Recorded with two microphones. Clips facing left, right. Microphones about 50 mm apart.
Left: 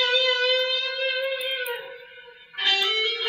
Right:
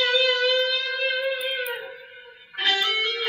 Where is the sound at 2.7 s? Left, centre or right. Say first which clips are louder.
Even; centre.